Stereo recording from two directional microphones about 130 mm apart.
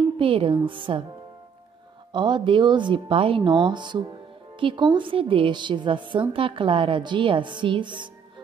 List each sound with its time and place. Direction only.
0.2 s speech: 45° right (ahead or behind)
2.1 s speech: 35° right (ahead or behind)